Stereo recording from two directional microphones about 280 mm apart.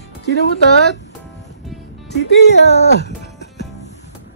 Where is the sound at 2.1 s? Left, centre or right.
Left.